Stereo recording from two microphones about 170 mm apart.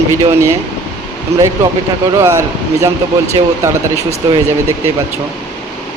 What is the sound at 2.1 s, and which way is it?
Speech, 15° right (ahead or behind).